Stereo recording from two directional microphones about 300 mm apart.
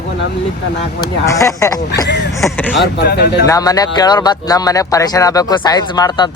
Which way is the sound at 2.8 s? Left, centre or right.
Left.